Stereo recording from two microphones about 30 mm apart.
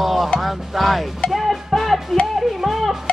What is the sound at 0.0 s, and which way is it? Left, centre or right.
Music, centre.